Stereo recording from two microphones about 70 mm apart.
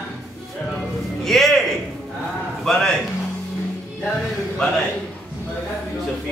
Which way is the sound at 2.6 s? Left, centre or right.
Centre.